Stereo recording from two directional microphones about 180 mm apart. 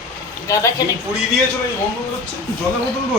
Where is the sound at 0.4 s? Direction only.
15° left (ahead or behind).